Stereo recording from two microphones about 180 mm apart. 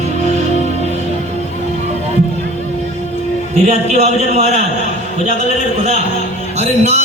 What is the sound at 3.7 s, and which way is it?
Speech, 40° right (ahead or behind).